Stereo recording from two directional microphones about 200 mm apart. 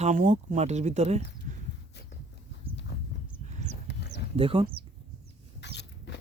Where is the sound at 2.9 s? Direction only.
55° left (ahead or behind).